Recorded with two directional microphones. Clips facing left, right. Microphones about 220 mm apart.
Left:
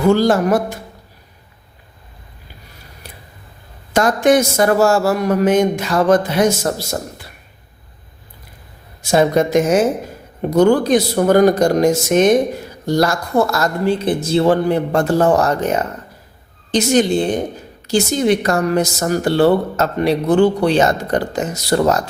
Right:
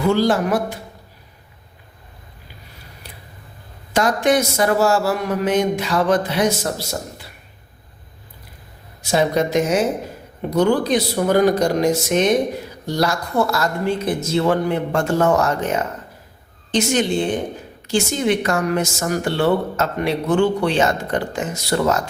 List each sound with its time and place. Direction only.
0.0 s speech: 45° left (ahead or behind)
3.9 s speech: 45° left (ahead or behind)
9.0 s speech: 50° left (ahead or behind)
14.0 s a woman's voice: 30° left (ahead or behind)